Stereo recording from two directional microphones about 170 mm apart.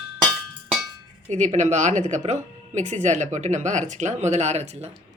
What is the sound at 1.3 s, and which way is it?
Speech, 45° right (ahead or behind).